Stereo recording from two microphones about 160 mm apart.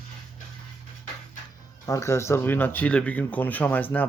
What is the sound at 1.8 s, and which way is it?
Speech, 20° left (ahead or behind).